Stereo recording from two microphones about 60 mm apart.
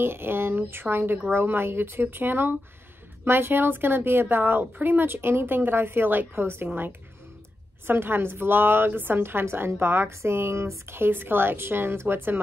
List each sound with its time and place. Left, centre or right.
0.0 s a woman's voice: right